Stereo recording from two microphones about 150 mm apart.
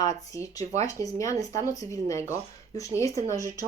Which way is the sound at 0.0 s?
20° left (ahead or behind).